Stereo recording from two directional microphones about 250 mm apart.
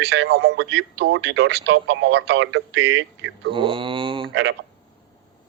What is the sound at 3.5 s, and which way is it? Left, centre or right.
Speech, centre.